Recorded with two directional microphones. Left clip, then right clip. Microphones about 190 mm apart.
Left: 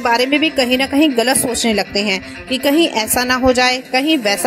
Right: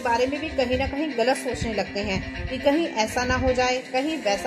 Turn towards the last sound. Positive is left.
turn(degrees=55)  # may be behind; listen again after turning